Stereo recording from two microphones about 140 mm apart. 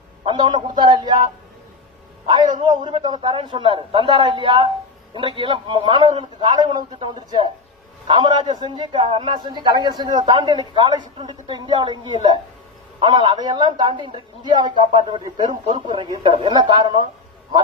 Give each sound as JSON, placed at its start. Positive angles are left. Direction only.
{"t": 0.3, "sound": "a man's voice", "side_deg": -30}
{"t": 2.2, "sound": "a man's voice", "side_deg": -35}